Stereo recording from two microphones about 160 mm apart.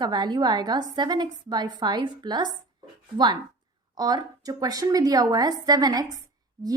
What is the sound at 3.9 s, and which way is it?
A woman's voice, 25° right (ahead or behind).